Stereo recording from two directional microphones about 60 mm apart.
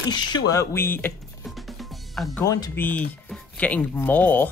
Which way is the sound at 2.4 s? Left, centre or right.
Left.